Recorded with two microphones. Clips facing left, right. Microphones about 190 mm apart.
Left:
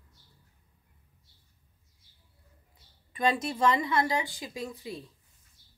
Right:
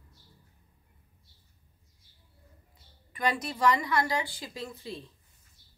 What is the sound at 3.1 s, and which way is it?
Speech, 25° left (ahead or behind).